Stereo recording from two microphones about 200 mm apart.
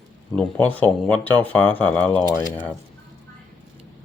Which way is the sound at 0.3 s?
5° left (ahead or behind).